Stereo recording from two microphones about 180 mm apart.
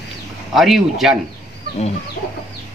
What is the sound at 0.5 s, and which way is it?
Speech, centre (ahead or behind).